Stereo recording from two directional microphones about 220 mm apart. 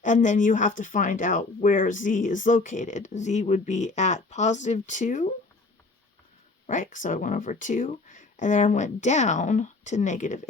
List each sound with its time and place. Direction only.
0.0 s speech: 35° left (ahead or behind)
6.7 s speech: 35° left (ahead or behind)